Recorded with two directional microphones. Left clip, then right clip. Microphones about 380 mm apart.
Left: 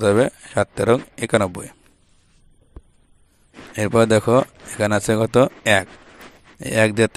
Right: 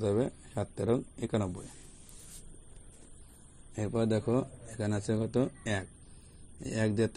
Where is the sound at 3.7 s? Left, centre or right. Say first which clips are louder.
Left 16 dB; left.